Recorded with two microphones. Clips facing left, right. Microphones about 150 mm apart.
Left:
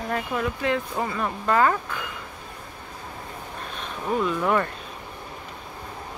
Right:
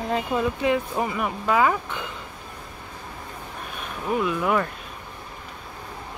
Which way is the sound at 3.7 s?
5° right (ahead or behind).